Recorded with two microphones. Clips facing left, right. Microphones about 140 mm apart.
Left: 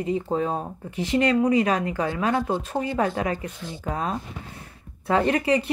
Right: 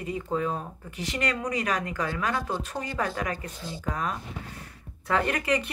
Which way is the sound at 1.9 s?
30° left (ahead or behind).